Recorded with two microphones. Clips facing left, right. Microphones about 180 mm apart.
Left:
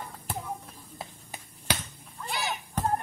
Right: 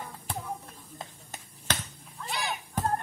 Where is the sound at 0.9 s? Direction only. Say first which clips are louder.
Left 2 dB; 10° left (ahead or behind).